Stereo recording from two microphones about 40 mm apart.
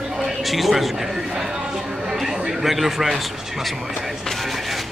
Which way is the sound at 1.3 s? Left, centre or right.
Centre.